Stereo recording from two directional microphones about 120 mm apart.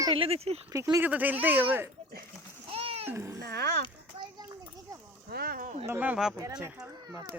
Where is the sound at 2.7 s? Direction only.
50° right (ahead or behind).